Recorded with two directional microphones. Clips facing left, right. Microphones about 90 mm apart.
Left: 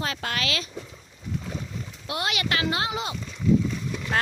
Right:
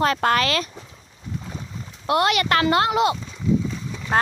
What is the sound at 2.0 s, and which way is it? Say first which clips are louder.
Speech: right 10 dB; 55° right (ahead or behind).